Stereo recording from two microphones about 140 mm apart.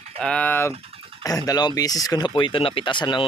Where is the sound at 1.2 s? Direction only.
25° left (ahead or behind).